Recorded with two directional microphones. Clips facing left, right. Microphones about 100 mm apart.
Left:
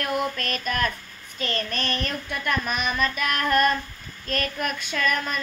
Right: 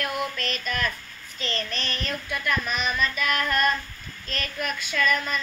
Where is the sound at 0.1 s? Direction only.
45° left (ahead or behind).